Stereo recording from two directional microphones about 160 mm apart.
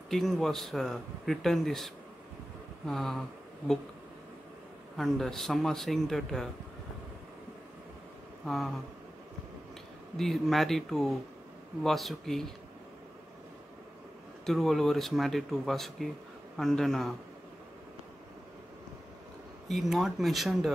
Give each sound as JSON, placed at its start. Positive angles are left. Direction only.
{"t": 0.1, "sound": "speech", "side_deg": 0}
{"t": 2.9, "sound": "speech", "side_deg": 0}
{"t": 4.9, "sound": "speech", "side_deg": 0}
{"t": 8.5, "sound": "speech", "side_deg": 0}
{"t": 10.1, "sound": "speech", "side_deg": 0}
{"t": 14.4, "sound": "speech", "side_deg": 0}
{"t": 19.7, "sound": "speech", "side_deg": 0}